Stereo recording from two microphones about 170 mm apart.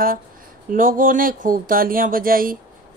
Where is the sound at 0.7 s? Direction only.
55° right (ahead or behind).